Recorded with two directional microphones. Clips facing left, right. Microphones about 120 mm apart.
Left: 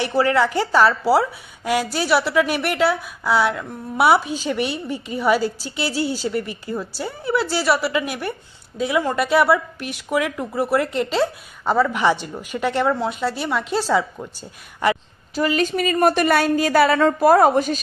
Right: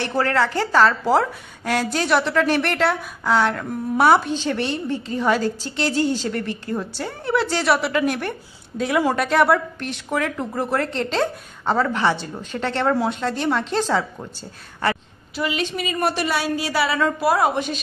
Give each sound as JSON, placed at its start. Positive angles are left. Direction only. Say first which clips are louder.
{"t": 0.0, "sound": "a woman's voice", "louder": "left 2 dB", "side_deg": 15}
{"t": 15.3, "sound": "a woman's voice", "louder": "left 5 dB", "side_deg": 40}